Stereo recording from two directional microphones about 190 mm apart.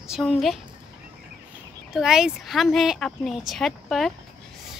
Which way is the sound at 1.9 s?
Centre (ahead or behind).